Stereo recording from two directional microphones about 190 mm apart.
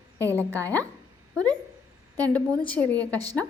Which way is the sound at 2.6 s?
10° left (ahead or behind).